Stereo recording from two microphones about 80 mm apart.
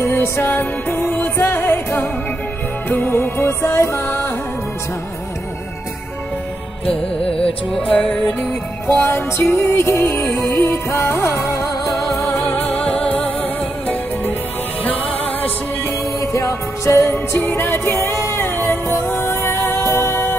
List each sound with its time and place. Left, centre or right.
0.0 s music: left
7.2 s music: centre
8.8 s music: left
12.4 s music: left
16.2 s music: left